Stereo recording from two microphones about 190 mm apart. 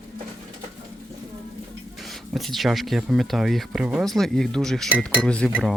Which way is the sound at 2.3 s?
Centre (ahead or behind).